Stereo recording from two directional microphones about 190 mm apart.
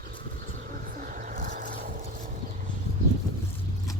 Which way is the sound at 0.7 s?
45° right (ahead or behind).